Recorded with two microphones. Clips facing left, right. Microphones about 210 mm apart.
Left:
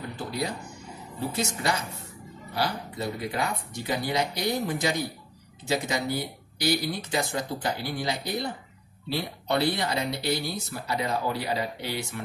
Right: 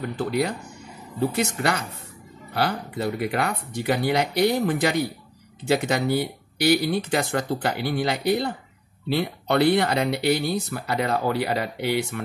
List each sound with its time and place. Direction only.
0.2 s speech: 65° right (ahead or behind)